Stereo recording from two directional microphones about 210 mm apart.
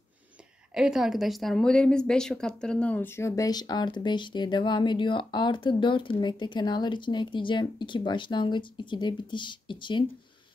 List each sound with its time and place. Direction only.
0.7 s speech: centre (ahead or behind); by 10.0 s 25° left (ahead or behind)